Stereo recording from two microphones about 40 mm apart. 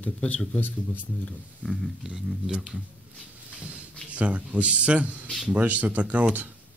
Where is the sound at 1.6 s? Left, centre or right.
Right.